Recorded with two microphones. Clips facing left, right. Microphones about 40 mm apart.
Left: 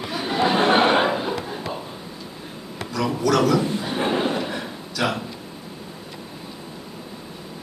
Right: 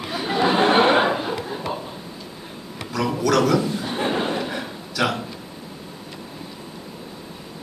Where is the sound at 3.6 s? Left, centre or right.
Left.